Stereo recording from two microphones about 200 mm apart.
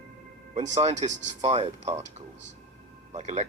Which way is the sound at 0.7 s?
30° right (ahead or behind).